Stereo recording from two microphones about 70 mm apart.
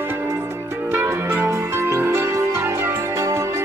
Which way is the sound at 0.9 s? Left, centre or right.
Right.